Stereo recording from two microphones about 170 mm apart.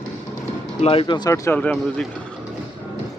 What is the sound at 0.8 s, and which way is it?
Speech, 35° left (ahead or behind).